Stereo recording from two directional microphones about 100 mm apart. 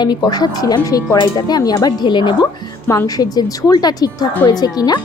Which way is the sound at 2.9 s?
35° left (ahead or behind).